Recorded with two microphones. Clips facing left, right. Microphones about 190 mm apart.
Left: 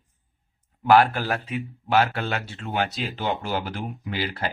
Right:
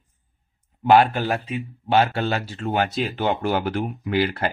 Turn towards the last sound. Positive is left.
turn(degrees=-55)  # may be behind; listen again after turning